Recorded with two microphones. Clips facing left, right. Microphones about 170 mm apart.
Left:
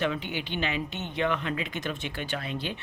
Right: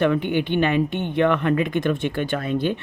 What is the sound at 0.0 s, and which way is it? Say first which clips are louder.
Speech: right 10 dB; 55° right (ahead or behind).